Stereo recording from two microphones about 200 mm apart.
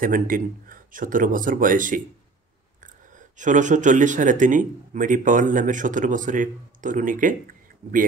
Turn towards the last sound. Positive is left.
turn(degrees=-45)  # may be behind; listen again after turning